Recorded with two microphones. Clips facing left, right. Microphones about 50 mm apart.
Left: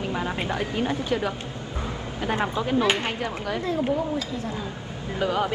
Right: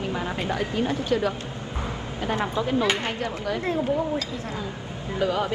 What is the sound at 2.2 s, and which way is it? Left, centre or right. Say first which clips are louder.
A woman's voice: even; left.